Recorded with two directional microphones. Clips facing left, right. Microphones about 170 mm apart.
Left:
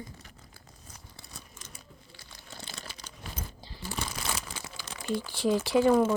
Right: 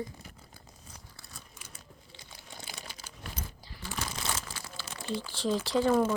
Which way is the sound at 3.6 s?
30° left (ahead or behind).